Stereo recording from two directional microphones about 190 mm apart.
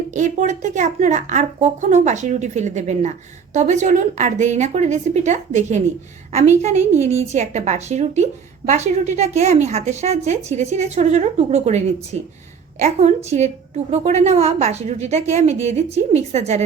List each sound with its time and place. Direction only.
0.1 s a woman's voice: 40° right (ahead or behind)